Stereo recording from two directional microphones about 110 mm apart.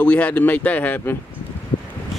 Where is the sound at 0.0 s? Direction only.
15° left (ahead or behind).